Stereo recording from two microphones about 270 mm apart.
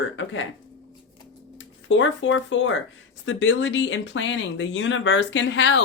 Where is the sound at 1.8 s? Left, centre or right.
Left.